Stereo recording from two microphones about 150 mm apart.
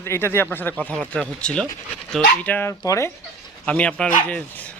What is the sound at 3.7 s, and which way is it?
Speech, 10° left (ahead or behind).